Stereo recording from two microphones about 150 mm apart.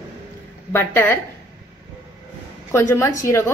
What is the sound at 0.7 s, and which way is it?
Speech, 15° left (ahead or behind).